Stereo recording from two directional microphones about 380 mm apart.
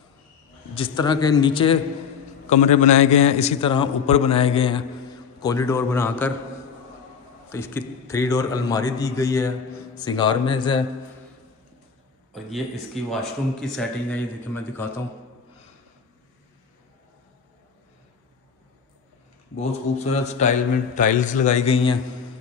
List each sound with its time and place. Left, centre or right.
0.7 s a man's voice: centre
7.4 s a man's voice: centre
12.4 s speech: centre
20.0 s a man's voice: centre